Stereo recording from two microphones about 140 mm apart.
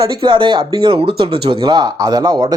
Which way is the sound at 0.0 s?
35° right (ahead or behind).